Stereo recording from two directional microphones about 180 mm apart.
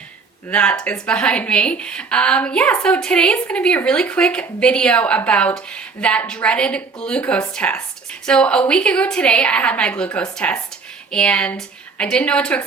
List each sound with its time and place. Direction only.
0.5 s a woman's voice: 5° left (ahead or behind)